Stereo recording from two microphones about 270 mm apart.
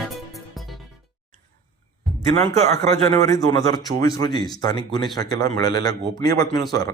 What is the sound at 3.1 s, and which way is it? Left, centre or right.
Speech, centre.